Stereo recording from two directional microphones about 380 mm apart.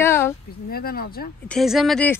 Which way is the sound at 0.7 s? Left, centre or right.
Left.